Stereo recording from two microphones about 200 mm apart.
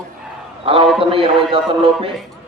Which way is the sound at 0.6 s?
25° right (ahead or behind).